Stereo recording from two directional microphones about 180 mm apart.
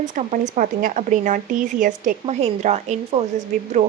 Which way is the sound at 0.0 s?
40° right (ahead or behind).